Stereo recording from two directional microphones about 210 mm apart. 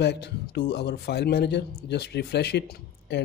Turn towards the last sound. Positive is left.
turn(degrees=55)  # may be behind; listen again after turning